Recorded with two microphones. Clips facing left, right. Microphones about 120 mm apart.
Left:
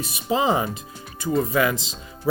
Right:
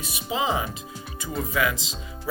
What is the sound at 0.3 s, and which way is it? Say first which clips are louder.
Speech: left 5 dB; 45° left (ahead or behind).